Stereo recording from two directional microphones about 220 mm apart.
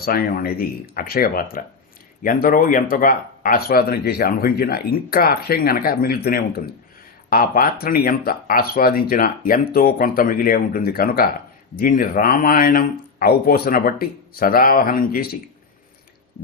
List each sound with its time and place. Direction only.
0.0 s speech: 45° left (ahead or behind)